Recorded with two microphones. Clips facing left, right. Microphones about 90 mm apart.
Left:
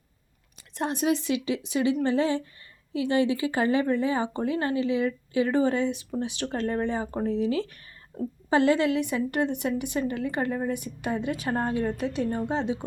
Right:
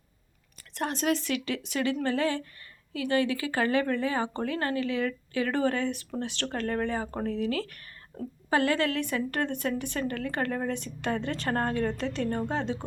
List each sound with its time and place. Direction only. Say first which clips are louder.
0.7 s a woman's voice: left 2 dB; 20° left (ahead or behind)